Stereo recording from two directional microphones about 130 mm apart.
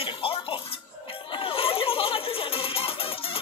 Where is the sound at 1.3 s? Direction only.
45° left (ahead or behind).